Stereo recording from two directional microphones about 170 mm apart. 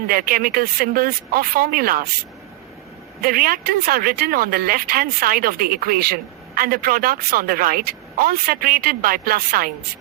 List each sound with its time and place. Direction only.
0.1 s speech: 60° right (ahead or behind)
3.2 s speech: 60° right (ahead or behind)